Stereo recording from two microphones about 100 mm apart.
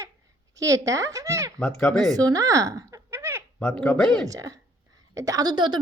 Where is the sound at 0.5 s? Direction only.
30° right (ahead or behind).